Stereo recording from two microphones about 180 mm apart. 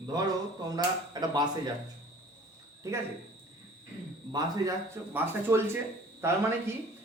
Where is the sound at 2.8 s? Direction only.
15° right (ahead or behind).